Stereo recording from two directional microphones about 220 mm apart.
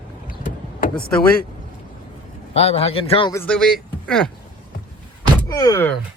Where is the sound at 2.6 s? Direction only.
25° left (ahead or behind).